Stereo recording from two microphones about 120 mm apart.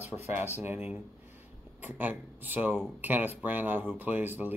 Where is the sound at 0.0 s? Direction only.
20° right (ahead or behind).